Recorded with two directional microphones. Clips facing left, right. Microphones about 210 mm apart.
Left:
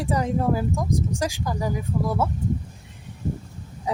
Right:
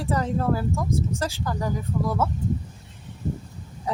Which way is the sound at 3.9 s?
15° left (ahead or behind).